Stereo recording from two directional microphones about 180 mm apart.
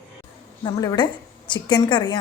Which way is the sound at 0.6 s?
25° left (ahead or behind).